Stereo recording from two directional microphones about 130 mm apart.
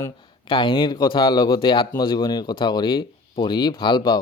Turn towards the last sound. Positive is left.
turn(degrees=35)  # may be behind; listen again after turning